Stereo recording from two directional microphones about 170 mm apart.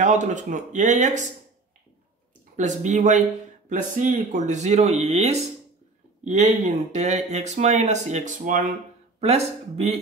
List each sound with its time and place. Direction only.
0.0 s speech: 45° right (ahead or behind)
2.5 s speech: 45° right (ahead or behind)